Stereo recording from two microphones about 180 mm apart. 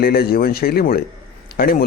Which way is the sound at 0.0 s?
55° left (ahead or behind).